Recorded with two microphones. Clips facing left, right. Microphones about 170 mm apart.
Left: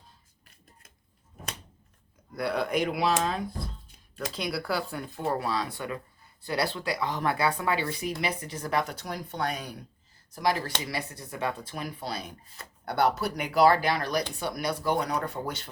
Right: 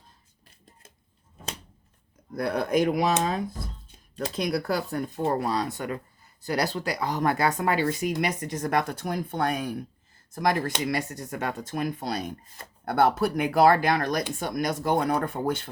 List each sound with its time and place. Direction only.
2.3 s speech: 45° right (ahead or behind)
4.4 s speech: 45° right (ahead or behind)